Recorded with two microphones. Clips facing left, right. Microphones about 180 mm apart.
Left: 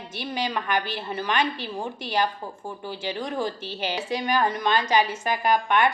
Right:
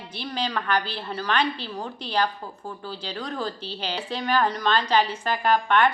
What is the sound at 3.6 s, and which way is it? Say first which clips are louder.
Speech: left 2 dB; 50° left (ahead or behind).